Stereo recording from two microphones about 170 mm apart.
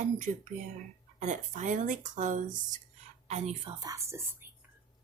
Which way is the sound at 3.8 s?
20° right (ahead or behind).